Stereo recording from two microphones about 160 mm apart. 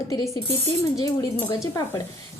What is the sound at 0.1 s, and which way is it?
A woman's voice, 20° left (ahead or behind).